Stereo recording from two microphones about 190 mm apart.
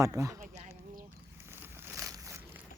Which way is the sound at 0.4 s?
40° right (ahead or behind).